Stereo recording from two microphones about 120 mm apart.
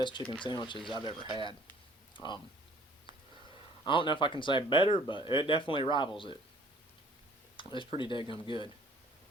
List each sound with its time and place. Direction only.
0.4 s speech: 40° left (ahead or behind)
3.8 s speech: 45° left (ahead or behind)
7.5 s speech: 45° left (ahead or behind)